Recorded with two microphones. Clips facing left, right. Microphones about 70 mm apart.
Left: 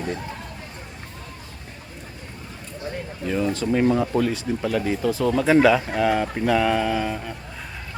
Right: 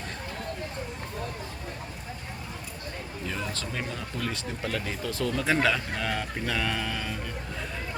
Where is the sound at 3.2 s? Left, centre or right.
Centre.